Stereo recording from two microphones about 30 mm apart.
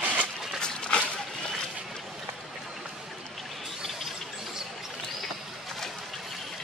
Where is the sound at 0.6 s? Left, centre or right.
Left.